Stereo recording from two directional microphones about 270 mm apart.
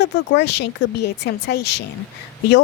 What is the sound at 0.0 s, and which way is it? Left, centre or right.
A woman's voice, left.